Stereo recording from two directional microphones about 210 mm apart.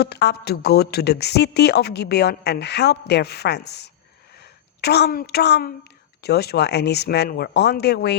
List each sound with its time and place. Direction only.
0.0 s speech: 50° left (ahead or behind)